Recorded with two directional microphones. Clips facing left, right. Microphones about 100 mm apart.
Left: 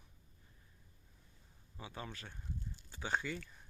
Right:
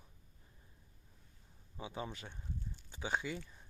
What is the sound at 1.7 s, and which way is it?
Speech, 15° right (ahead or behind).